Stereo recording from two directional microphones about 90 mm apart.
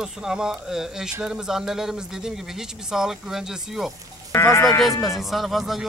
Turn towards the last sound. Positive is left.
turn(degrees=0)  # may be behind; listen again after turning